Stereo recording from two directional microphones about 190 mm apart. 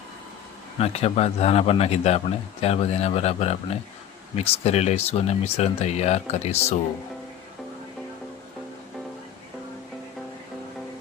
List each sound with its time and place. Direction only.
0.8 s speech: 30° left (ahead or behind)